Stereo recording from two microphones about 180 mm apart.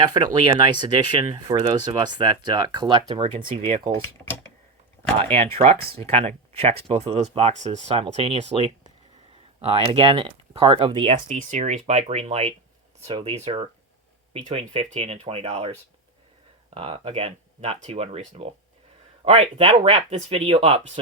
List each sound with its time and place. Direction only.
0.0 s speech: 25° right (ahead or behind)
5.1 s speech: 35° right (ahead or behind)
16.7 s speech: 30° right (ahead or behind)